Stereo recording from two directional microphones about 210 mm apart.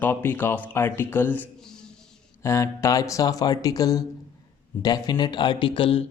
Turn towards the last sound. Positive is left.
turn(degrees=25)  # may be behind; listen again after turning